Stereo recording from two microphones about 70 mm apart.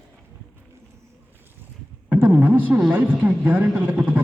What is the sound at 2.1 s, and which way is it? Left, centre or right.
A man's voice, right.